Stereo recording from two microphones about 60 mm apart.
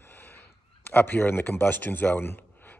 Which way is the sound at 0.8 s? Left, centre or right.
Left.